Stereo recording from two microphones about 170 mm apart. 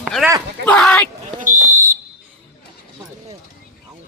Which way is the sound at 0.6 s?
5° left (ahead or behind).